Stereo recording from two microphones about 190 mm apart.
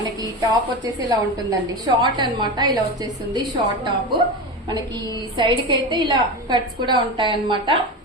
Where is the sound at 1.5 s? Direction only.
20° right (ahead or behind).